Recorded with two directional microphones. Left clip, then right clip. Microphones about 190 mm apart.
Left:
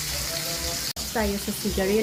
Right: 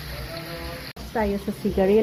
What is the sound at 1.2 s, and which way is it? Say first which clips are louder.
Speech: right 2 dB; centre (ahead or behind).